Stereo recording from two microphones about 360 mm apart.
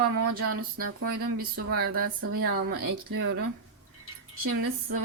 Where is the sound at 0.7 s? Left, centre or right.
Right.